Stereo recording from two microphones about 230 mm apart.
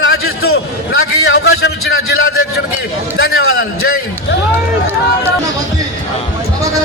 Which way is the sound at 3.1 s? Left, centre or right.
Left.